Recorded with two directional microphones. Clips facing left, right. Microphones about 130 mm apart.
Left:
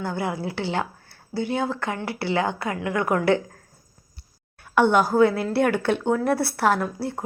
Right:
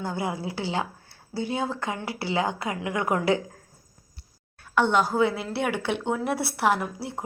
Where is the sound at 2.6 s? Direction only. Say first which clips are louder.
Left 3 dB; 20° right (ahead or behind).